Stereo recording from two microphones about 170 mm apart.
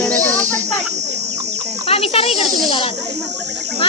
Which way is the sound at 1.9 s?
35° left (ahead or behind).